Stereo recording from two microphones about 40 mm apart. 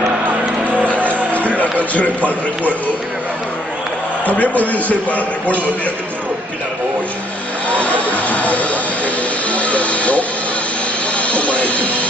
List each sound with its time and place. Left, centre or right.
0.7 s music: right
1.6 s speech: left
4.3 s a man's voice: left
8.0 s a sound: left
11.1 s music: left